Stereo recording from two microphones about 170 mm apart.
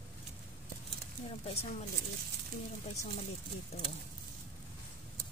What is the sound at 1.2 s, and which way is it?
Speech, 35° left (ahead or behind).